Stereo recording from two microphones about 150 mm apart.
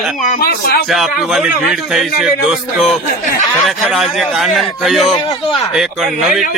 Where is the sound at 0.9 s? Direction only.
Centre (ahead or behind).